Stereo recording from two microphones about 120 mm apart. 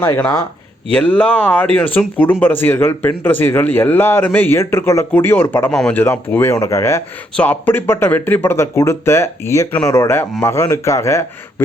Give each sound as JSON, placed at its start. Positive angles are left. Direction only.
{"t": 0.0, "sound": "speech", "side_deg": 15}
{"t": 5.7, "sound": "speech", "side_deg": 5}
{"t": 6.0, "sound": "speech", "side_deg": 20}